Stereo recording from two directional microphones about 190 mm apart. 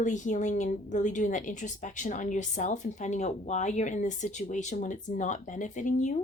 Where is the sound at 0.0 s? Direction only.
40° left (ahead or behind).